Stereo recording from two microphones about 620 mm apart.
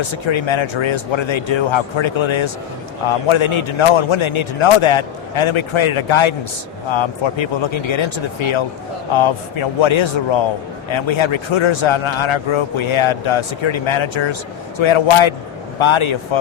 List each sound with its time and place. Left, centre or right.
0.0 s a man's voice: left